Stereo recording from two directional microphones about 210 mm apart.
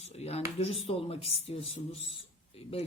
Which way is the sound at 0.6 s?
30° left (ahead or behind).